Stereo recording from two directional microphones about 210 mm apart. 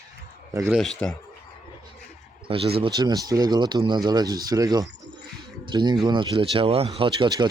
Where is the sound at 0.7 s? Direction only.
Centre (ahead or behind).